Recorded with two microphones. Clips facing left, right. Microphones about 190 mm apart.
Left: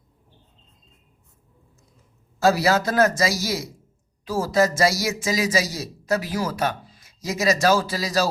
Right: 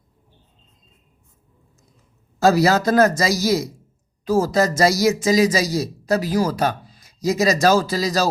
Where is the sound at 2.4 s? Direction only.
40° right (ahead or behind).